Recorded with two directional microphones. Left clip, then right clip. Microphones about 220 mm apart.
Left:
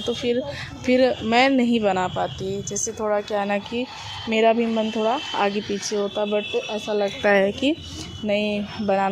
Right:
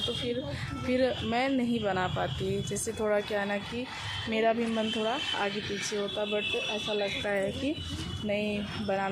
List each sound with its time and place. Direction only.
0.9 s speech: 40° left (ahead or behind); by 2.3 s 20° left (ahead or behind)
3.0 s a woman's voice: 10° left (ahead or behind)
3.2 s speech: 30° left (ahead or behind)
6.8 s speech: 50° left (ahead or behind)